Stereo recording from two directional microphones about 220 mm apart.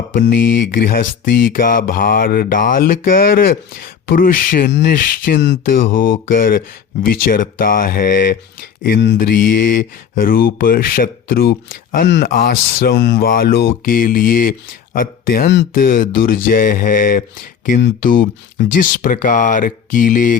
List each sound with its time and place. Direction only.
0.1 s speech: 40° left (ahead or behind)